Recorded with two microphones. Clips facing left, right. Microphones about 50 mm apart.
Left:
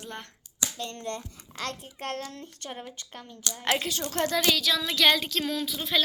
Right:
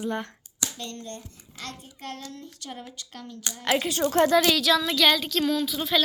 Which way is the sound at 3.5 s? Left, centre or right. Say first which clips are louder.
Left 1 dB; right.